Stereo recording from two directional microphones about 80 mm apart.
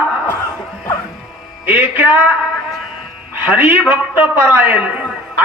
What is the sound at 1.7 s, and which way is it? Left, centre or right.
Music, right.